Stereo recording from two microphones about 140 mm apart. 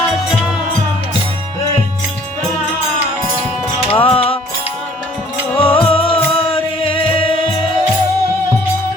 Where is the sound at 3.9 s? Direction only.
40° left (ahead or behind).